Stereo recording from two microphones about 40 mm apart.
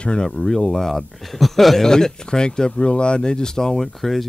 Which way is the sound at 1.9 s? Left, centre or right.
Centre.